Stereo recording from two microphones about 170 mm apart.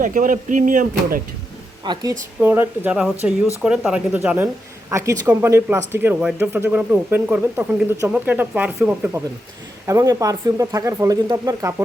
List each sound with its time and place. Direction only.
0.0 s speech: 50° right (ahead or behind)
1.8 s speech: 25° right (ahead or behind)
2.4 s speech: 10° right (ahead or behind)